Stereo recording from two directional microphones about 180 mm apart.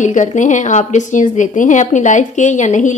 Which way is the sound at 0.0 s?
45° left (ahead or behind).